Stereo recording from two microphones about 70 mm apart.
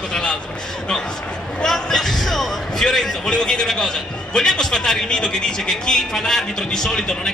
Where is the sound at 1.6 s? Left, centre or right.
Centre.